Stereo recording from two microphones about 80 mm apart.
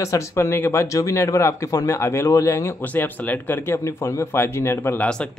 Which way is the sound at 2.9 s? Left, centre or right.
Left.